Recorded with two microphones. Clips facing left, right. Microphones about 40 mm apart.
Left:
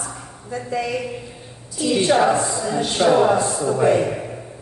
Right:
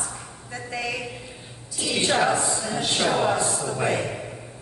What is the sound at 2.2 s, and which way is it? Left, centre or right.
A woman's voice, left.